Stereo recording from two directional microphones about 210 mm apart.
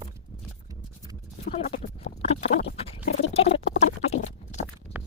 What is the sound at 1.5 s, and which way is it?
Clip-clop, 30° left (ahead or behind).